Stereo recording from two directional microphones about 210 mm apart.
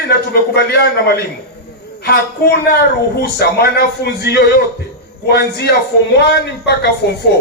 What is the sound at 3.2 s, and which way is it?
Speech, 50° left (ahead or behind).